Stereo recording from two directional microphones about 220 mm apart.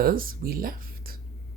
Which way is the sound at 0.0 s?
40° right (ahead or behind).